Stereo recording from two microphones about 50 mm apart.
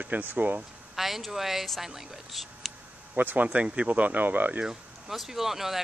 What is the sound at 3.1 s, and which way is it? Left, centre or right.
Speech, right.